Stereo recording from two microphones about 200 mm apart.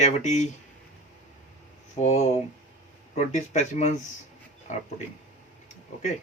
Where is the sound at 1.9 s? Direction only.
35° left (ahead or behind).